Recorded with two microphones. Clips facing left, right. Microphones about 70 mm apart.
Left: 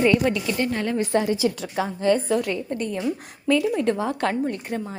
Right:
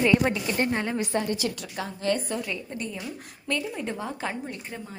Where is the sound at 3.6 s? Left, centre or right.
Left.